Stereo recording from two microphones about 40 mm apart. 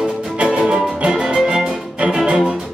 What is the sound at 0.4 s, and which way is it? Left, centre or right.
Music, right.